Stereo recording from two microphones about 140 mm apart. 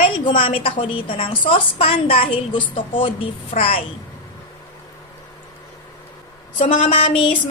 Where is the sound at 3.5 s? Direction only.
50° left (ahead or behind).